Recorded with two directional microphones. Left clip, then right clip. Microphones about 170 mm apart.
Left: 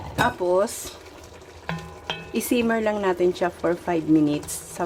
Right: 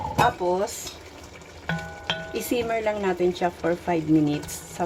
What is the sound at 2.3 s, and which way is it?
A woman's voice, 25° left (ahead or behind).